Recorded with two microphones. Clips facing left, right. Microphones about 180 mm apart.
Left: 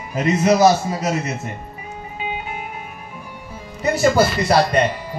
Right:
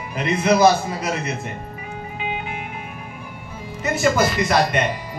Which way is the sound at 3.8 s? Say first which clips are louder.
Left 3 dB; 35° left (ahead or behind).